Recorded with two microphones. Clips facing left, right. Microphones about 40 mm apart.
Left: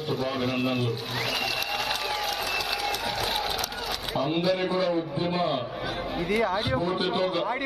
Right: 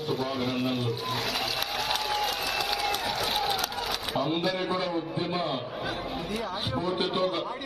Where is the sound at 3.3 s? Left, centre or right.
Right.